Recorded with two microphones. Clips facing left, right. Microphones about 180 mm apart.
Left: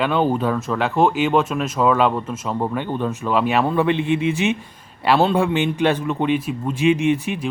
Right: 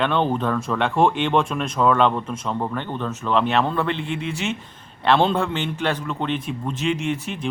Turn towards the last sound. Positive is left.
turn(degrees=15)  # may be behind; listen again after turning